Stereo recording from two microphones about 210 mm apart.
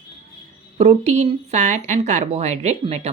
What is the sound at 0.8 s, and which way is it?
Speech, 30° right (ahead or behind).